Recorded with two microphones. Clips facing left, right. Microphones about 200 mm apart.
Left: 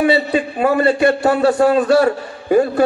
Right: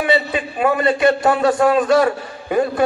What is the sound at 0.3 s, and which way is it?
A man's voice, 35° left (ahead or behind).